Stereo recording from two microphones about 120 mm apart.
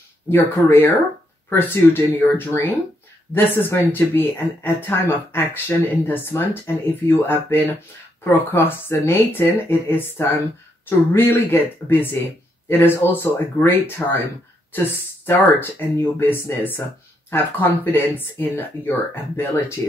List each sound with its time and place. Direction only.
0.3 s speech: 15° left (ahead or behind)